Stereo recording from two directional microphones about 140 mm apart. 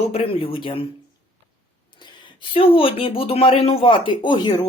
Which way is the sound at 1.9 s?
35° left (ahead or behind).